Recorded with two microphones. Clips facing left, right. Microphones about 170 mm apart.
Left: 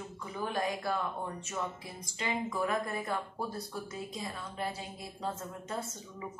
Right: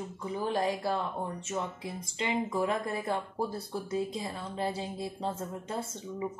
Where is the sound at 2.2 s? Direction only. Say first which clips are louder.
Right 3 dB; 25° right (ahead or behind).